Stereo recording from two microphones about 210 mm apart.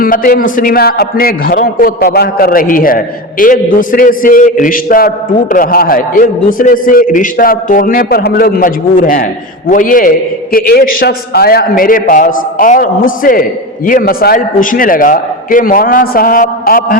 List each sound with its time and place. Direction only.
0.0 s a man's voice: 40° left (ahead or behind)